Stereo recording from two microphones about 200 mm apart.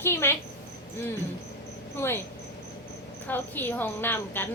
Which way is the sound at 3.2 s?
10° left (ahead or behind).